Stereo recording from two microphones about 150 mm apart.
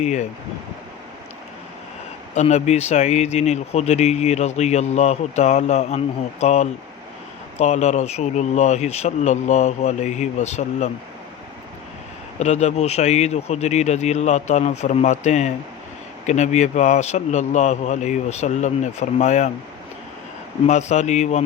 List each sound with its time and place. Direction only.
0.0 s speech: 50° left (ahead or behind)
2.3 s speech: 50° left (ahead or behind)
12.4 s speech: 50° left (ahead or behind)
20.7 s speech: 50° left (ahead or behind)